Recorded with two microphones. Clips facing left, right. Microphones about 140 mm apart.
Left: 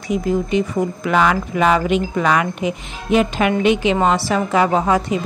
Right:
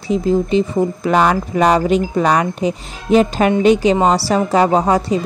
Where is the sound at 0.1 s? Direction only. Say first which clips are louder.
Right 3 dB; 30° right (ahead or behind).